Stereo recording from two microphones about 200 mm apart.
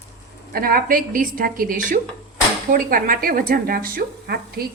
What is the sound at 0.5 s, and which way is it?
Speech, 45° right (ahead or behind).